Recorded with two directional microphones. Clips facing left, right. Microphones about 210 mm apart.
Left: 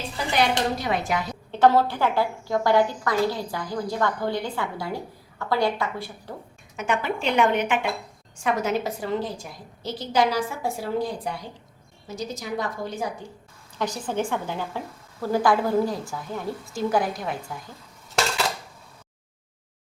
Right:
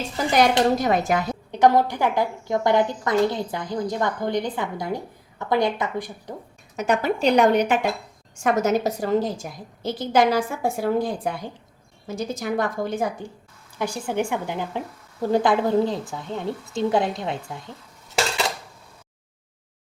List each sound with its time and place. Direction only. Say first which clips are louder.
0.3 s a woman's voice: right 5 dB; 45° right (ahead or behind)
1.5 s a woman's voice: right 1 dB; 15° right (ahead or behind)
6.7 s a woman's voice: right 4 dB; 40° right (ahead or behind)
13.7 s a woman's voice: right 2 dB; 10° right (ahead or behind)